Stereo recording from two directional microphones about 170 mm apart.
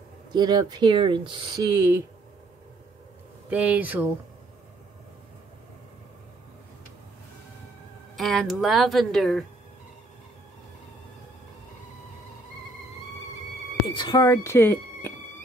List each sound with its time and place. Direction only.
0.3 s speech: 25° right (ahead or behind)
3.4 s speech: 10° right (ahead or behind)
8.2 s speech: centre (ahead or behind)
13.9 s speech: 25° left (ahead or behind)